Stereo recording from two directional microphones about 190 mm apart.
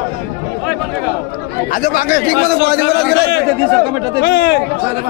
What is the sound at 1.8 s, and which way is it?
A man's voice, 50° left (ahead or behind).